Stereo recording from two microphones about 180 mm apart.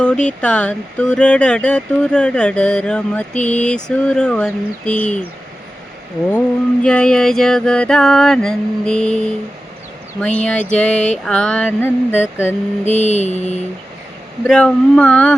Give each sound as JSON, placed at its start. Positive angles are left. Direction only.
{"t": 0.0, "sound": "speech", "side_deg": 5}
{"t": 6.8, "sound": "speech", "side_deg": 5}
{"t": 10.2, "sound": "a sound", "side_deg": 5}
{"t": 12.8, "sound": "mantra", "side_deg": 40}
{"t": 14.4, "sound": "speech", "side_deg": 5}